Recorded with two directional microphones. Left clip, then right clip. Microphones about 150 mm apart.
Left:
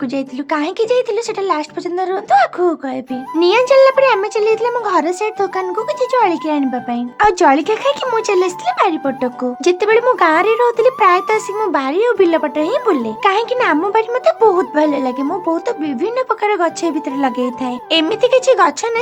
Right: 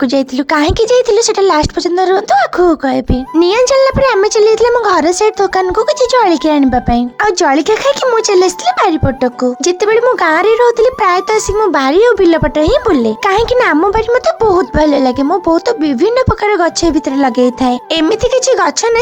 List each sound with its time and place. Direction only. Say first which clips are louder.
0.0 s speech: right 9 dB; 55° right (ahead or behind)
7.2 s speech: left 1 dB; 35° right (ahead or behind)